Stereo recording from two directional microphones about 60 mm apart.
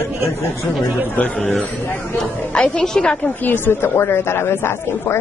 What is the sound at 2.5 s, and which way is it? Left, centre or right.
Speech, centre.